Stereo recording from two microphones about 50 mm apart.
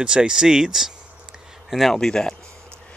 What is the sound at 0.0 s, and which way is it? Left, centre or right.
Speech, centre.